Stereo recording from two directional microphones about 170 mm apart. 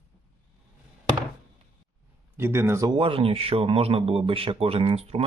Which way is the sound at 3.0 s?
30° right (ahead or behind).